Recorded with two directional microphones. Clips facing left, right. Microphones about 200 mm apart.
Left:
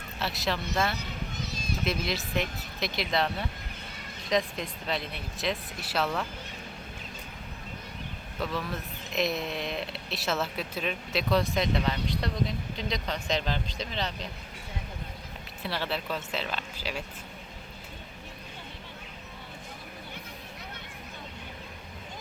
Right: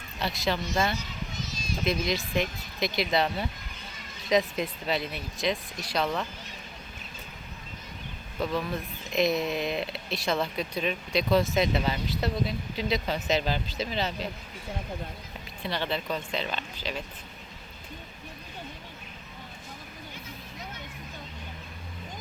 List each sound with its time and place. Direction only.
0.2 s speech: centre (ahead or behind)
0.9 s children playing: 60° left (ahead or behind)
1.8 s speech: centre (ahead or behind)
8.4 s speech: centre (ahead or behind)
15.6 s speech: 5° left (ahead or behind)